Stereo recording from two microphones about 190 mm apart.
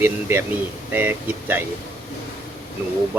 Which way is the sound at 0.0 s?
10° right (ahead or behind).